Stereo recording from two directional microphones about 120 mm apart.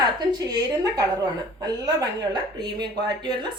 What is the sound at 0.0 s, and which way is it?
A woman's voice, 35° right (ahead or behind).